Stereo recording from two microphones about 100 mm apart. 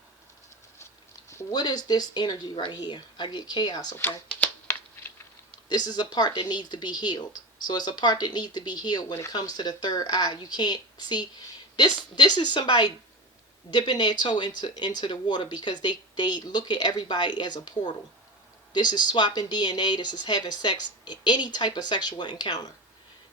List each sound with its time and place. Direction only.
1.5 s speech: 45° left (ahead or behind)
4.7 s a sound: 25° left (ahead or behind)
5.6 s speech: 45° left (ahead or behind)